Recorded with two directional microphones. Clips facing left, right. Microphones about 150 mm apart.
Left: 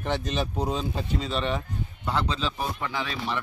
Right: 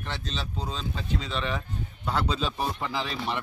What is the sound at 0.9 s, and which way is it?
Speech, 35° left (ahead or behind).